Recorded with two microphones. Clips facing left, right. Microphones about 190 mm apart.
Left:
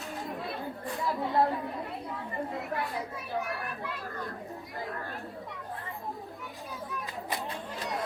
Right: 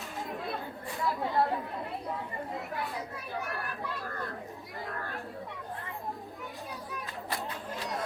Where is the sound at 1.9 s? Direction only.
Centre (ahead or behind).